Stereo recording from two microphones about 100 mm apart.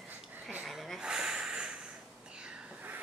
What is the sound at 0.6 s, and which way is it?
Snort, centre (ahead or behind).